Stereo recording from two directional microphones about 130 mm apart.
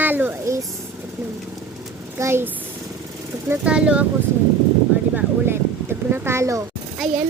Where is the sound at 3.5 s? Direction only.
10° right (ahead or behind).